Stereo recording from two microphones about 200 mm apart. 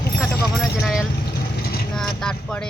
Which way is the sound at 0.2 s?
Centre (ahead or behind).